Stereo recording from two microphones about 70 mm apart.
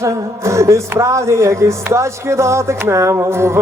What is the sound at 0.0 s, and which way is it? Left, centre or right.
Music, right.